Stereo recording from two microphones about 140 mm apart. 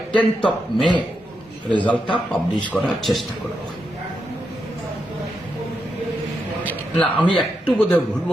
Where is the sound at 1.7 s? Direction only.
10° left (ahead or behind).